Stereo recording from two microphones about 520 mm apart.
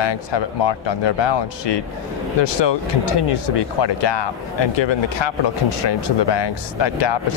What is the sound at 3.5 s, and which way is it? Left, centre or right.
Speech, left.